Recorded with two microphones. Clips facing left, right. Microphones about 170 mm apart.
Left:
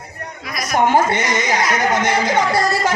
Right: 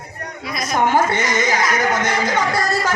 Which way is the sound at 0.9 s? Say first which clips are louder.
Left 1 dB; 15° left (ahead or behind).